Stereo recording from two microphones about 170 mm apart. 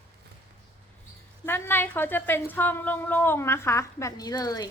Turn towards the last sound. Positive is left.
turn(degrees=20)  # may be behind; listen again after turning